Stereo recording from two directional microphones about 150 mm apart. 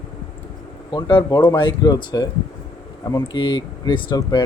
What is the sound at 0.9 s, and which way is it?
A man's voice, 25° left (ahead or behind).